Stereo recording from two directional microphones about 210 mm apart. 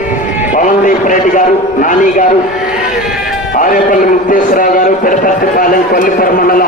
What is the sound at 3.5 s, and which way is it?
A man's voice, 40° left (ahead or behind).